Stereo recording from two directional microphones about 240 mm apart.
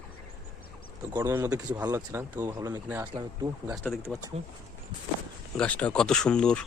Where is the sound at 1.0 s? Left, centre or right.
Centre.